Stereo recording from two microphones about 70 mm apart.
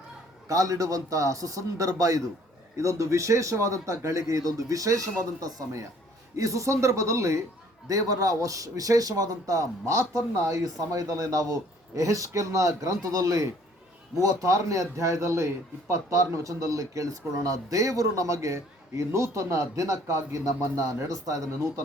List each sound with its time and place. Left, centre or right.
0.4 s a man's voice: right